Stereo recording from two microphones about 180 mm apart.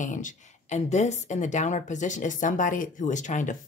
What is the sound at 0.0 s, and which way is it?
Speech, 45° left (ahead or behind).